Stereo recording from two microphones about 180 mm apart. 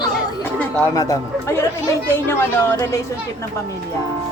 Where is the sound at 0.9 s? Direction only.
20° left (ahead or behind).